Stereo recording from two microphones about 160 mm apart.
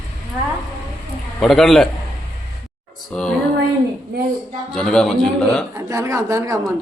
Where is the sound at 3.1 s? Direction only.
5° left (ahead or behind).